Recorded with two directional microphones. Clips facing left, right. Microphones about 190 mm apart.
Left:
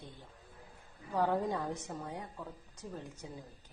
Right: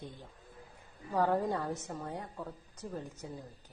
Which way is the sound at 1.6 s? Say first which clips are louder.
Right 1 dB; 15° left (ahead or behind).